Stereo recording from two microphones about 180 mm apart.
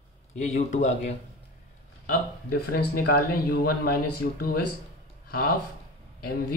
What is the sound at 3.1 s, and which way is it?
Speech, 60° left (ahead or behind).